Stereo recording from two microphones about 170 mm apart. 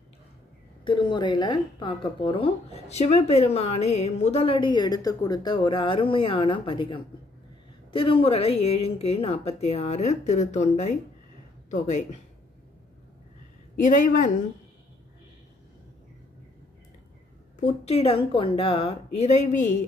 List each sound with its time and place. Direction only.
0.8 s speech: 25° left (ahead or behind)
13.7 s speech: 50° left (ahead or behind)
17.6 s speech: 40° left (ahead or behind)